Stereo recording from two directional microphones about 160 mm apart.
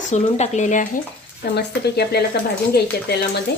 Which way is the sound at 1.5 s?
90° left.